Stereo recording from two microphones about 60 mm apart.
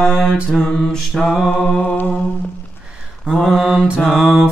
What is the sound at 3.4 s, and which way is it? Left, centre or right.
Mantra, centre.